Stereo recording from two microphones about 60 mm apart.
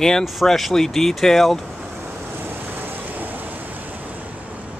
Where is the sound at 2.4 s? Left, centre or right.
Right.